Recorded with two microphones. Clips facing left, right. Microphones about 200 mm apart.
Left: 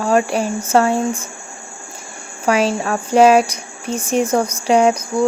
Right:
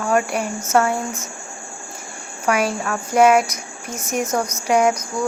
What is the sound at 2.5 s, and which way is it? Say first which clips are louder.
Speech: left 4 dB; 30° left (ahead or behind).